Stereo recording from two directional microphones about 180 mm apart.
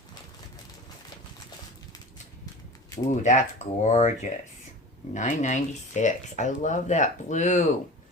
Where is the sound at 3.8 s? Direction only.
40° left (ahead or behind).